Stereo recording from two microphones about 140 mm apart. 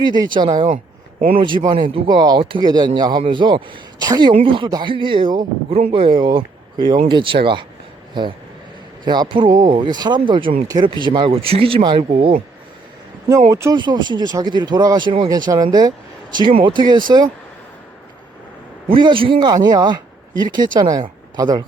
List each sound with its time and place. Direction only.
0.0 s speech: 30° right (ahead or behind)
13.5 s speech: 25° right (ahead or behind)
18.9 s speech: 35° right (ahead or behind)